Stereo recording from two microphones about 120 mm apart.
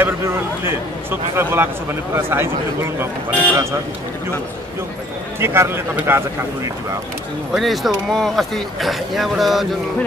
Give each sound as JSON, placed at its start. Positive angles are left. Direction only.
{"t": 0.0, "sound": "speech", "side_deg": -20}
{"t": 5.4, "sound": "speech", "side_deg": -20}
{"t": 7.5, "sound": "speech", "side_deg": 0}